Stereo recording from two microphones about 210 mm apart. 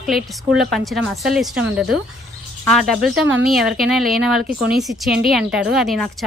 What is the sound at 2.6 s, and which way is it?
Speech, centre (ahead or behind).